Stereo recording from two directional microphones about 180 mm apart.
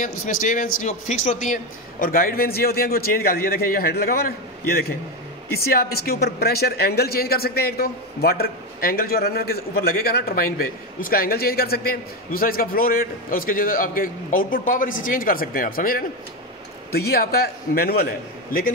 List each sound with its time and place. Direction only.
0.0 s speech: 45° left (ahead or behind)